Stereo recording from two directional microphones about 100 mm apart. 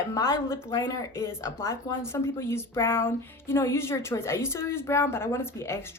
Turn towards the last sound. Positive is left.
turn(degrees=30)  # may be behind; listen again after turning